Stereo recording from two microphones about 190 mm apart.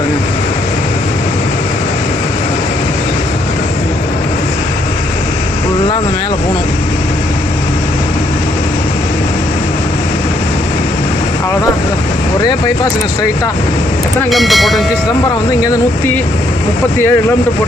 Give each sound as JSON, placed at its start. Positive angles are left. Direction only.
{"t": 12.4, "sound": "speech", "side_deg": 20}
{"t": 14.3, "sound": "speech", "side_deg": 0}
{"t": 15.6, "sound": "speech", "side_deg": 15}